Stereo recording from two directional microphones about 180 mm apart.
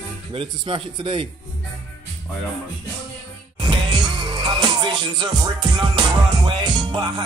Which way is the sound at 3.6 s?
25° right (ahead or behind).